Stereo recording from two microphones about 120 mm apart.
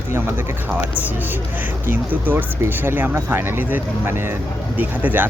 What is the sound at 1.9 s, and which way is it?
Speech, 15° right (ahead or behind).